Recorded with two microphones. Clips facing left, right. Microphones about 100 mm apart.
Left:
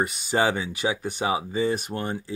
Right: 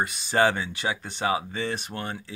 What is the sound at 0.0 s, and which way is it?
Speech, 10° left (ahead or behind).